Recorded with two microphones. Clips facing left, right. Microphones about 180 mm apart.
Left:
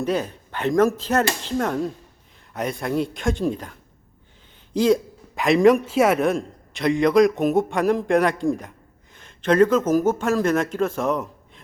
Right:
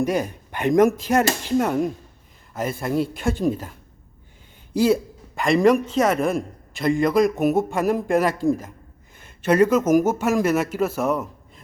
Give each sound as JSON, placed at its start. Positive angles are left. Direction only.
{"t": 0.0, "sound": "a man's voice", "side_deg": -10}